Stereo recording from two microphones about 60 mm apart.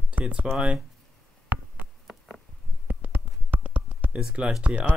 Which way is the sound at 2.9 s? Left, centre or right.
Right.